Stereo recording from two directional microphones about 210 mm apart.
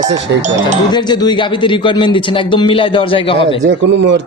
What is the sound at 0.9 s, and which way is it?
A man's voice, 20° left (ahead or behind).